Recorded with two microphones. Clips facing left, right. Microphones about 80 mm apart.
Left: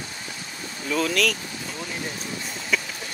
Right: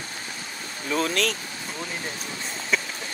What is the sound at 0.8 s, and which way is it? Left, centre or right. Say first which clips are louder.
Speech: left 1 dB; right.